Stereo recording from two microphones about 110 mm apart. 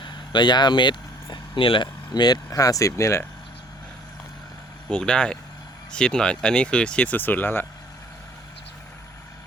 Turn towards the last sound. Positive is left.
turn(degrees=15)  # may be behind; listen again after turning